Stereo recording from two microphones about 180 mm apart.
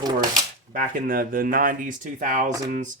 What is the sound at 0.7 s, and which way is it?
Speech, 50° right (ahead or behind).